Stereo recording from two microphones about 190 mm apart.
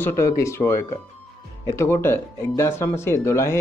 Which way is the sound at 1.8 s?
15° left (ahead or behind).